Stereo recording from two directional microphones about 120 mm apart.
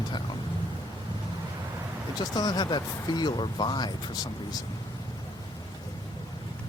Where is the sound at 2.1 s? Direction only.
35° left (ahead or behind).